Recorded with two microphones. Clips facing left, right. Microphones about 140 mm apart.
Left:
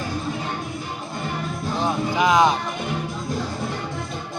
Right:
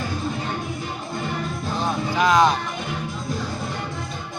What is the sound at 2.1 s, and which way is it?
Speech, 15° left (ahead or behind).